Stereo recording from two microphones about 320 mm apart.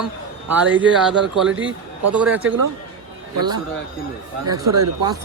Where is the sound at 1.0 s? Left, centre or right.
Centre.